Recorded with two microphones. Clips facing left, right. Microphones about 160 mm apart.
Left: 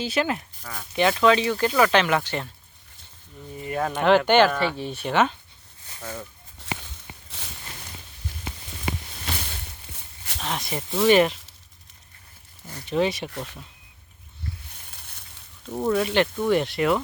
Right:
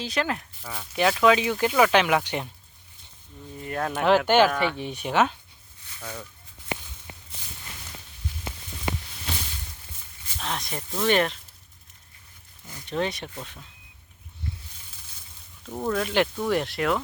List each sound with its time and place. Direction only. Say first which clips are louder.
0.0 s speech: left 3 dB; 5° left (ahead or behind)
0.6 s speech: left 1 dB; 10° right (ahead or behind)
3.6 s speech: left 2 dB; 5° left (ahead or behind)
6.6 s a sound: right 1 dB; 80° left
10.4 s speech: left 2 dB; centre (ahead or behind)
12.9 s speech: left 5 dB; 5° left (ahead or behind)
14.8 s a sound: left 3 dB; 65° left (ahead or behind)
15.7 s speech: left 3 dB; 5° left (ahead or behind)